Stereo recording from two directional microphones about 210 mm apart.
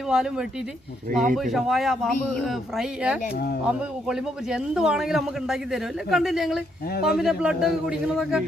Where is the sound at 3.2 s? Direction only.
45° left (ahead or behind).